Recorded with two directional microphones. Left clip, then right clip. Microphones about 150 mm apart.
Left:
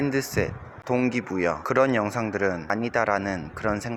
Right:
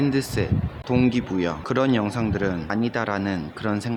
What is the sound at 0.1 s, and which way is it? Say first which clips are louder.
Speech: right 1 dB; 30° left (ahead or behind).